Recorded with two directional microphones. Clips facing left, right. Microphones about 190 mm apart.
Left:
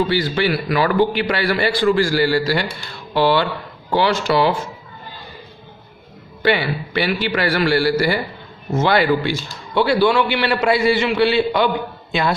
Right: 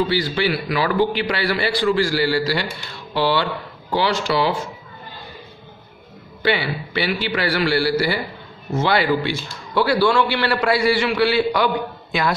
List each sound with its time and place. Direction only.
0.7 s a man's voice: 50° left (ahead or behind)
6.4 s a man's voice: 50° left (ahead or behind)
9.8 s a man's voice: 20° left (ahead or behind)